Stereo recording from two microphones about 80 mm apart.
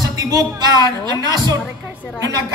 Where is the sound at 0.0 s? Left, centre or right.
Right.